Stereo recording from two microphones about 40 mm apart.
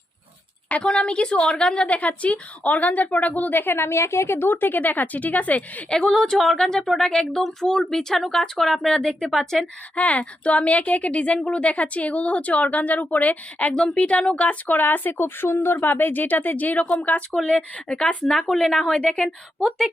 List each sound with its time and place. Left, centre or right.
0.8 s a woman's voice: left
1.9 s speech: left
3.6 s speech: left
5.9 s speech: centre
8.9 s speech: centre
9.2 s speech: centre
9.9 s speech: left
13.7 s a woman's voice: left
14.8 s speech: left
15.2 s speech: left
17.3 s a woman's voice: centre
18.3 s speech: centre
18.9 s a woman's voice: left